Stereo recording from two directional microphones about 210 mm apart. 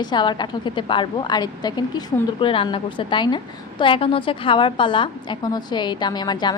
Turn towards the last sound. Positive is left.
turn(degrees=20)  # may be behind; listen again after turning